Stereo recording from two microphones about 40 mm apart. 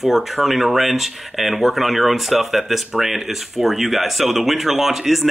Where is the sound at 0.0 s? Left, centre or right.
Centre.